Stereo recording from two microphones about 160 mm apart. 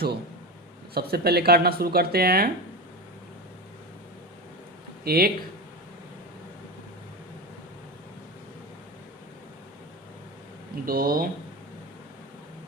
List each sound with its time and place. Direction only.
0.9 s speech: 80° right
5.0 s speech: 70° right (ahead or behind)
10.8 s speech: 65° right (ahead or behind)